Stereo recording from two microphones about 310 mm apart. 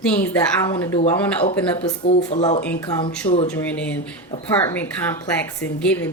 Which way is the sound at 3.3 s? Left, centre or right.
Centre.